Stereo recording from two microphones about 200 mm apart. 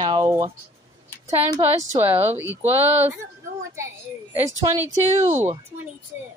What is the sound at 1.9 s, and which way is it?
Speech, 10° right (ahead or behind).